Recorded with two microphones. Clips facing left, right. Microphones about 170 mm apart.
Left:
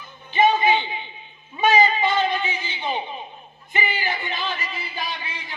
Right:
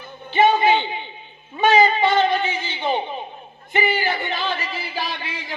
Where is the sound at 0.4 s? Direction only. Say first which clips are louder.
Right 2 dB; 40° right (ahead or behind).